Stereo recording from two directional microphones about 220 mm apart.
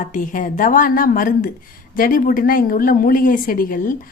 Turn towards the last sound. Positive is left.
turn(degrees=35)  # may be behind; listen again after turning